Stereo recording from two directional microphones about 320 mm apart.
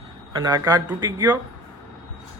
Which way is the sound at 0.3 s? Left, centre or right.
Centre.